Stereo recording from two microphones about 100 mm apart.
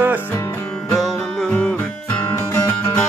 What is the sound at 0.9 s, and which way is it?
Music, 10° left (ahead or behind).